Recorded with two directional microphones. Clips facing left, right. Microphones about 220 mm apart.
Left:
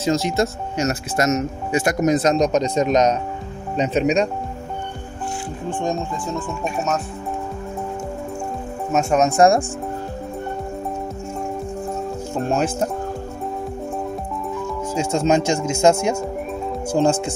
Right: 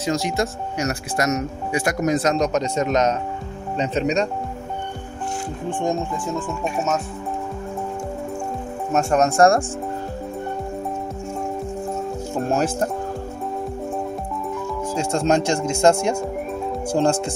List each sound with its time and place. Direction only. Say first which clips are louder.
0.0 s speech: left 3 dB; 25° left (ahead or behind)
8.9 s speech: left 1 dB; 5° left (ahead or behind)
12.4 s speech: even; centre (ahead or behind)
15.0 s speech: left 2 dB; 5° left (ahead or behind)